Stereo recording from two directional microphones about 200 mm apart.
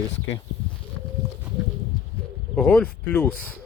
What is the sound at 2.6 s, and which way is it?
Speech, 5° left (ahead or behind).